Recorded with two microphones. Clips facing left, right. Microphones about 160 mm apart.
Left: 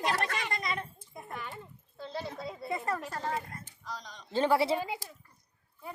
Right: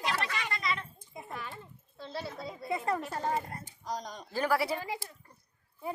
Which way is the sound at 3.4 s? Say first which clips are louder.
Right 4 dB; 40° right (ahead or behind).